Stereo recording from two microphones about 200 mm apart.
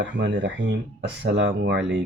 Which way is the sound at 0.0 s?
60° right (ahead or behind).